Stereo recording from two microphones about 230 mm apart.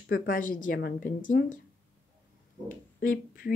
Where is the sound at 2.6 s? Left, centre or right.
Left.